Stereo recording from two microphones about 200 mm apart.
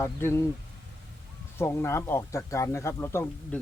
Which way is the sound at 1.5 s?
10° left (ahead or behind).